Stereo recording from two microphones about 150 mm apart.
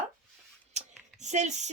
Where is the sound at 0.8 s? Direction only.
50° right (ahead or behind).